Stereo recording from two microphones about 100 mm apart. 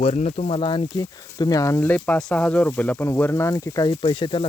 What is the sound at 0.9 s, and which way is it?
Speech, 40° left (ahead or behind).